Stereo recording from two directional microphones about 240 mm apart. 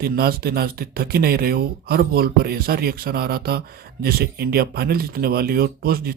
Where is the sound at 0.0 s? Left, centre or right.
Right.